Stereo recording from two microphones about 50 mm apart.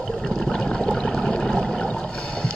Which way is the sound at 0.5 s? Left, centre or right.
Centre.